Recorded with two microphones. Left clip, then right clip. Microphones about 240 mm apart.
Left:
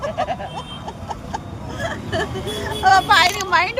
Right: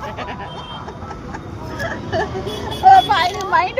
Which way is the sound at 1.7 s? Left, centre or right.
Left.